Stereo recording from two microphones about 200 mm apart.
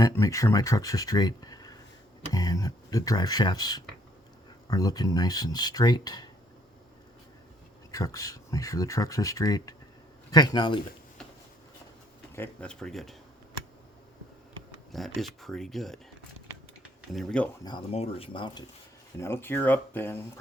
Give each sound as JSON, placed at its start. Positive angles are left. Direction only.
{"t": 0.0, "sound": "speech", "side_deg": 15}
{"t": 7.9, "sound": "speech", "side_deg": 15}
{"t": 12.4, "sound": "speech", "side_deg": 5}
{"t": 14.9, "sound": "speech", "side_deg": 0}
{"t": 17.1, "sound": "speech", "side_deg": 0}
{"t": 17.6, "sound": "speech", "side_deg": 20}
{"t": 19.2, "sound": "speech", "side_deg": 10}